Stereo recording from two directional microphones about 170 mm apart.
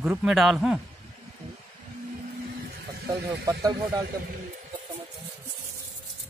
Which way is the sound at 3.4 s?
20° right (ahead or behind).